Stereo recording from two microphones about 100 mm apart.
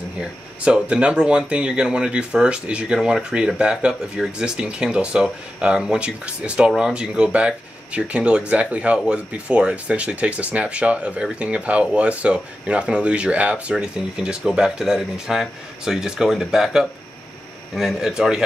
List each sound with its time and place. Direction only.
0.2 s a man's voice: 10° right (ahead or behind)